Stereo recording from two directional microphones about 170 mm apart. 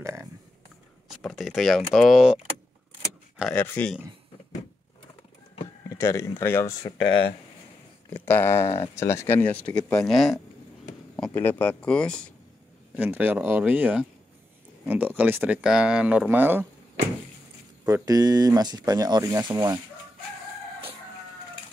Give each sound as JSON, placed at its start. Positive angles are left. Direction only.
{"t": 0.0, "sound": "a sound", "side_deg": -15}
{"t": 1.1, "sound": "speech", "side_deg": 0}
{"t": 3.5, "sound": "speech", "side_deg": 10}
{"t": 5.9, "sound": "speech", "side_deg": 15}
{"t": 8.1, "sound": "speech", "side_deg": 10}
{"t": 12.9, "sound": "speech", "side_deg": -10}
{"t": 17.8, "sound": "speech", "side_deg": -20}